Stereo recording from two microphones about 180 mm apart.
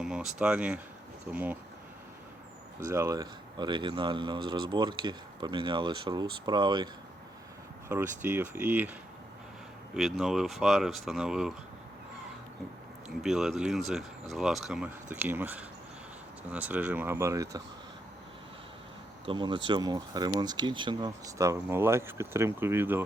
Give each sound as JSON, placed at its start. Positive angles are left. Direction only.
{"t": 0.0, "sound": "speech", "side_deg": -5}
{"t": 2.9, "sound": "speech", "side_deg": -15}
{"t": 7.9, "sound": "speech", "side_deg": -15}
{"t": 13.2, "sound": "speech", "side_deg": 0}
{"t": 19.2, "sound": "speech", "side_deg": -25}